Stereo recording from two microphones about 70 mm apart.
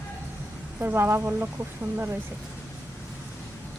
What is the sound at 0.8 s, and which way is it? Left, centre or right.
Speech, right.